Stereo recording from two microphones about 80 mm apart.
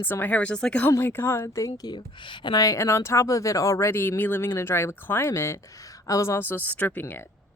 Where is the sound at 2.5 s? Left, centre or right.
Left.